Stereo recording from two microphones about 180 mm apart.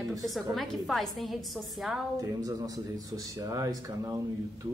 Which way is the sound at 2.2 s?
20° right (ahead or behind).